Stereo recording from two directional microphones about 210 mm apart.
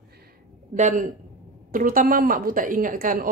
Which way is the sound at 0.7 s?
35° right (ahead or behind).